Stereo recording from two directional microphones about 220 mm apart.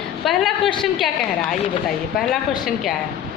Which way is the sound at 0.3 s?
Centre (ahead or behind).